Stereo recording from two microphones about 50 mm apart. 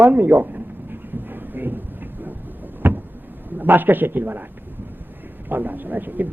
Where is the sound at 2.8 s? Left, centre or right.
Right.